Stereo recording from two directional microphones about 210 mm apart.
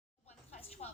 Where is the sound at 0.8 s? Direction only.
30° left (ahead or behind).